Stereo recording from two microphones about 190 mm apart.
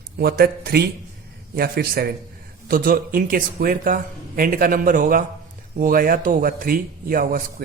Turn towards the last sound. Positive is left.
turn(degrees=-50)  # may be behind; listen again after turning